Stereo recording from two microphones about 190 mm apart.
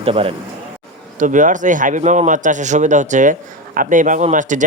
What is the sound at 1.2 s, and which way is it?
Speech, 40° right (ahead or behind).